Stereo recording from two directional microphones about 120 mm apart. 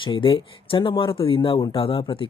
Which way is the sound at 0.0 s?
45° left (ahead or behind).